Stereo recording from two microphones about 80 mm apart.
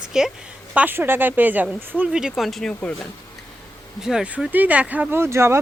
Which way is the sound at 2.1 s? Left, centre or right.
Centre.